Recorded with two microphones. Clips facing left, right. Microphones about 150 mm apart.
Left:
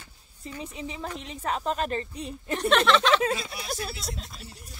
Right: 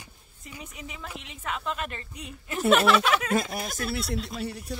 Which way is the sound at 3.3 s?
50° right (ahead or behind).